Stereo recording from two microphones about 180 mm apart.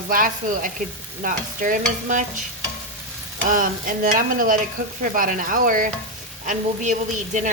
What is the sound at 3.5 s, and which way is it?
Speech, 50° right (ahead or behind).